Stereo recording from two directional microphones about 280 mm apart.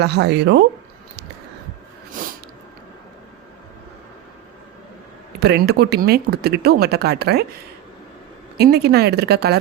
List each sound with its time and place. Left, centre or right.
0.0 s speech: right
2.2 s a sound: right
5.4 s speech: right
8.5 s speech: right